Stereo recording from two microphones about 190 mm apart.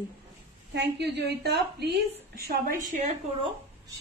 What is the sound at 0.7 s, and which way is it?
A woman's voice, 65° right (ahead or behind).